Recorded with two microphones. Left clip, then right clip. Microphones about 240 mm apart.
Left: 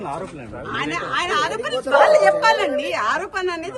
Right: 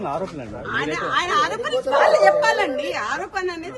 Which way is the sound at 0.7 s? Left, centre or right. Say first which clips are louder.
Right 1 dB; centre.